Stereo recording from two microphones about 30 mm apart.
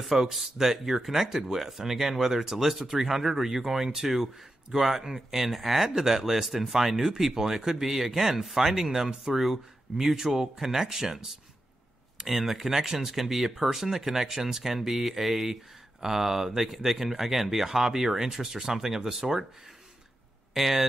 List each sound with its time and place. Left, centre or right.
0.3 s speech: centre
5.5 s speech: centre
12.3 s speech: centre
20.5 s speech: centre